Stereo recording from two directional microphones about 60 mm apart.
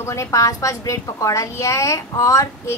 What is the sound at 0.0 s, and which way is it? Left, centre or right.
A woman's voice, left.